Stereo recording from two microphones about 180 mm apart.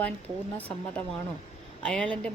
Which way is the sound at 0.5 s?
10° left (ahead or behind).